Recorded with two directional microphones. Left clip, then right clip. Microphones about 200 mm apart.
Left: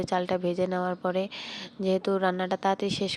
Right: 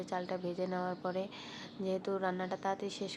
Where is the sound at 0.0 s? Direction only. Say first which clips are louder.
Left 11 dB; 40° left (ahead or behind).